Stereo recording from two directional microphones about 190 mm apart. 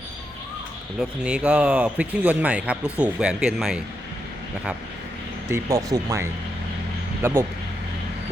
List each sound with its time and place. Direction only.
0.9 s speech: 5° right (ahead or behind)
5.5 s speech: 15° right (ahead or behind)